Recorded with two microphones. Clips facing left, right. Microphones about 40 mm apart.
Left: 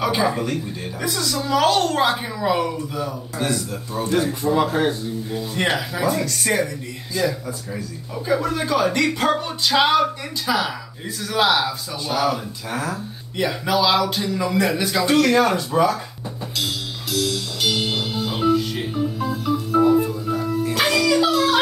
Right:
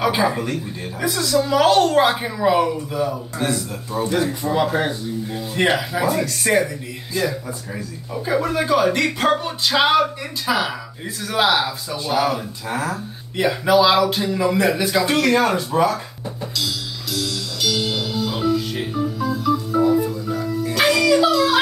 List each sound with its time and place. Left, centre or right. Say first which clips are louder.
0.0 s speech: right 1 dB; centre
16.5 s music: left 1 dB; left
18.6 s organ: even; centre
19.1 s organ: right 2 dB; left
20.2 s music: left 1 dB; left
20.7 s music: right 3 dB; centre